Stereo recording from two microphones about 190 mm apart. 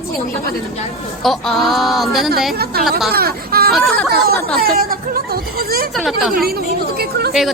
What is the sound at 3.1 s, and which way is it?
Speech, 55° right (ahead or behind).